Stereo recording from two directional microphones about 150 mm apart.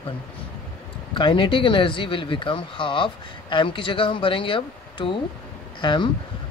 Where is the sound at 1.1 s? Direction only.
35° left (ahead or behind).